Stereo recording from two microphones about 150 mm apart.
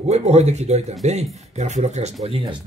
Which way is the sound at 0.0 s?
45° right (ahead or behind).